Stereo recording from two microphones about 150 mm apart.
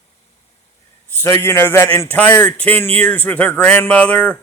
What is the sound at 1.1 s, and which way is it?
Speech, 15° left (ahead or behind).